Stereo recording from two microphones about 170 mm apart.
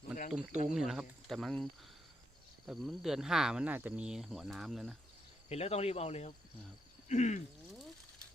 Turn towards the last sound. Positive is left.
turn(degrees=45)  # may be behind; listen again after turning